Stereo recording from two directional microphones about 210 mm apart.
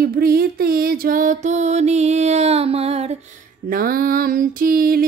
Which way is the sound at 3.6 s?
40° right (ahead or behind).